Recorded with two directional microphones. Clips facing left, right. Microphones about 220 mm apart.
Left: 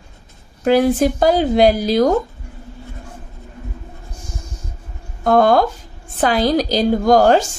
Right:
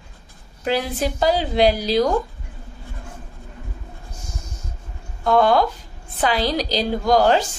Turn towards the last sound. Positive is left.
turn(degrees=45)  # may be behind; listen again after turning